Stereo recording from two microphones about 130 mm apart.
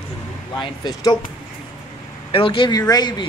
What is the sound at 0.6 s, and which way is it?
Speech, 30° left (ahead or behind).